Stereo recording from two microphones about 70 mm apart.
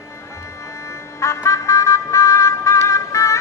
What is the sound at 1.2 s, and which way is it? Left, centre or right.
Music, left.